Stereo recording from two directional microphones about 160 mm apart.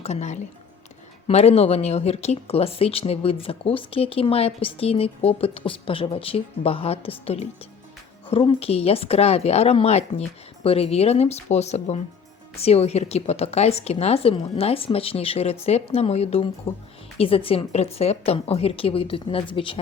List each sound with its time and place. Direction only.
0.0 s speech: 45° left (ahead or behind)